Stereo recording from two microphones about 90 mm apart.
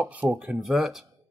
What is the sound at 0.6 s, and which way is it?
Speech, 5° right (ahead or behind).